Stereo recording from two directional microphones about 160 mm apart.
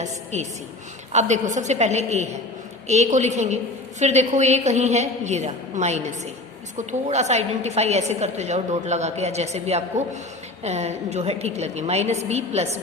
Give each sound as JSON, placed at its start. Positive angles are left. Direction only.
{"t": 0.0, "sound": "a woman's voice", "side_deg": -45}